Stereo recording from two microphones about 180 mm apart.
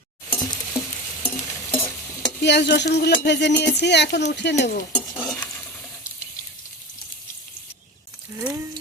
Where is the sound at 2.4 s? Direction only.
70° left (ahead or behind).